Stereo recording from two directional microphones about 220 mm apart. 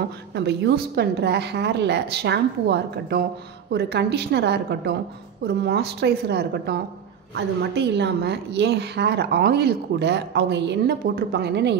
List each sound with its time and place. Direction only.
0.3 s a woman's voice: 50° right (ahead or behind)